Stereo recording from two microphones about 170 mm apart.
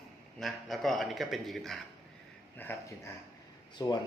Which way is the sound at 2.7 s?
10° left (ahead or behind).